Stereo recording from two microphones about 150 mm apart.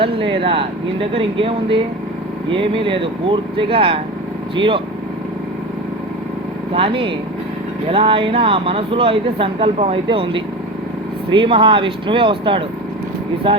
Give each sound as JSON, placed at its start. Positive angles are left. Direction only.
{"t": 0.0, "sound": "speech", "side_deg": -35}
{"t": 6.7, "sound": "speech", "side_deg": -35}